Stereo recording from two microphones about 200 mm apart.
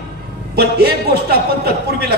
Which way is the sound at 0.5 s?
50° right (ahead or behind).